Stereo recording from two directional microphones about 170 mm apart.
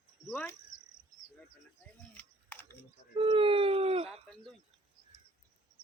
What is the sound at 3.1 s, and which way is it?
Speech, 30° right (ahead or behind).